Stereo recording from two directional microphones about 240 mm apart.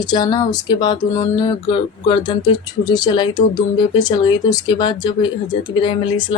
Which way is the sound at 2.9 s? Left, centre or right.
Centre.